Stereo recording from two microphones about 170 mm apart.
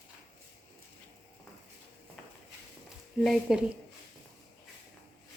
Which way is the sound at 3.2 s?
Centre (ahead or behind).